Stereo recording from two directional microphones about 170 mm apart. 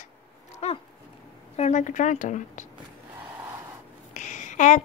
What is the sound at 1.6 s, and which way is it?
A woman's voice, 45° left (ahead or behind).